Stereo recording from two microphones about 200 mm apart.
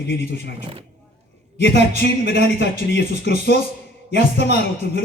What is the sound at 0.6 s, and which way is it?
Speech, 25° right (ahead or behind).